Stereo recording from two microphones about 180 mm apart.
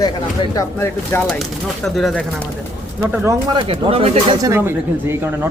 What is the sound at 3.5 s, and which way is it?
Speech, 30° right (ahead or behind).